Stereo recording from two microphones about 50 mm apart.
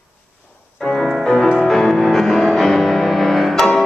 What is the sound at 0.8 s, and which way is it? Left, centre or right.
Music, centre.